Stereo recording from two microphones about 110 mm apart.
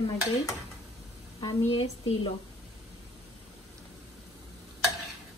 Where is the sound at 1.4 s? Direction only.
60° left (ahead or behind).